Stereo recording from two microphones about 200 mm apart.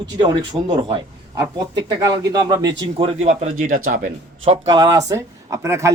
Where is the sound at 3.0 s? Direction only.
30° right (ahead or behind).